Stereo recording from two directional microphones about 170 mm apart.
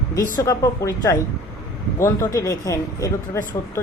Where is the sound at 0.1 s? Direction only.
20° left (ahead or behind).